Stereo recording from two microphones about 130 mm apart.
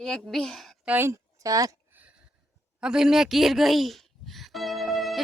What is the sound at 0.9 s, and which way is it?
Speech, 20° right (ahead or behind).